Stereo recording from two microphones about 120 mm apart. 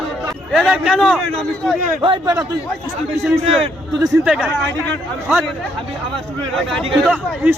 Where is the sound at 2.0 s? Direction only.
45° right (ahead or behind).